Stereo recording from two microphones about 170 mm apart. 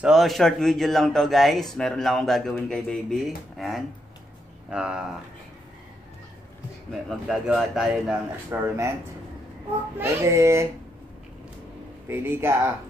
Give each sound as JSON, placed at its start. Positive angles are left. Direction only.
{"t": 0.0, "sound": "speech", "side_deg": 0}
{"t": 7.1, "sound": "speech", "side_deg": 0}
{"t": 8.5, "sound": "a child's voice", "side_deg": -15}
{"t": 9.9, "sound": "a child's voice", "side_deg": -15}
{"t": 12.1, "sound": "a child's voice", "side_deg": -15}